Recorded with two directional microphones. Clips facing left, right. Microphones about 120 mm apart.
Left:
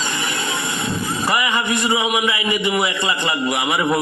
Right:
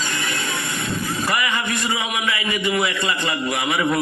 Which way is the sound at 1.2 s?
20° left (ahead or behind).